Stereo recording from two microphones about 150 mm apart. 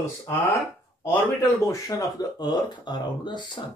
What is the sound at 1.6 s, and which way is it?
Speech, 20° left (ahead or behind).